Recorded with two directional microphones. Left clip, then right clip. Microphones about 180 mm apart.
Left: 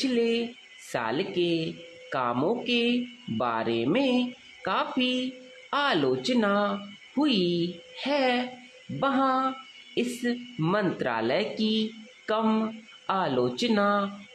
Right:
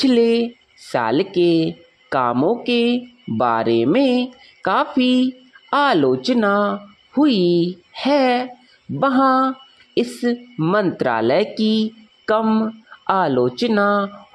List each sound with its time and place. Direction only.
0.0 s speech: 50° right (ahead or behind)